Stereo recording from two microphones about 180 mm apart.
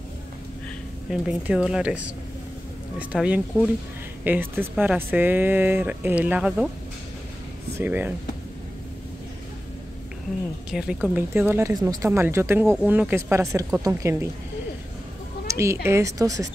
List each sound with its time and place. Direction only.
1.1 s speech: 5° right (ahead or behind)
7.8 s speech: 10° right (ahead or behind)
10.7 s speech: 5° right (ahead or behind)
15.4 s speech: 15° right (ahead or behind)